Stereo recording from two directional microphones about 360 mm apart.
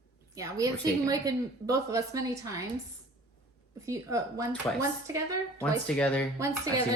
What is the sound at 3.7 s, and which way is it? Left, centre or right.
A woman's voice, centre.